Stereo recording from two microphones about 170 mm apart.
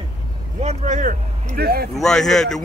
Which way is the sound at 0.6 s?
45° right (ahead or behind).